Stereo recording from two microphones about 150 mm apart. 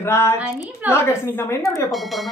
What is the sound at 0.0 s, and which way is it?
A man's voice, 20° left (ahead or behind).